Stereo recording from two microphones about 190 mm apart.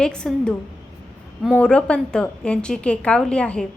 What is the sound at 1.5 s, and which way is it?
A woman's voice, 5° left (ahead or behind).